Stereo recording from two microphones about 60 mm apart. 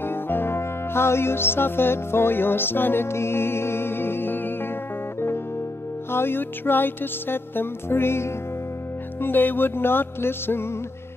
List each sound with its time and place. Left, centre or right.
0.0 s music: left
6.1 s music: left